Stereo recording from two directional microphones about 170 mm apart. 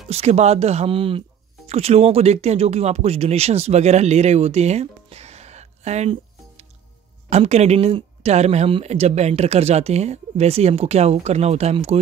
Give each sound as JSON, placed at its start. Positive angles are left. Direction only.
{"t": 0.1, "sound": "speech", "side_deg": -40}